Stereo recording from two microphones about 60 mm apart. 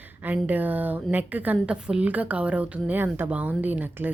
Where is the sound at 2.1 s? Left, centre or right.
Right.